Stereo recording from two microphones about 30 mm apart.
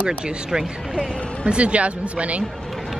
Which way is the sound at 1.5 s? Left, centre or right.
Right.